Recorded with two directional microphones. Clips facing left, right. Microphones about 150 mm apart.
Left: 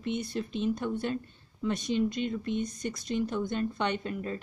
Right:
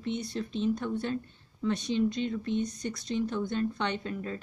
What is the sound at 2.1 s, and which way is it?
Speech, 55° left (ahead or behind).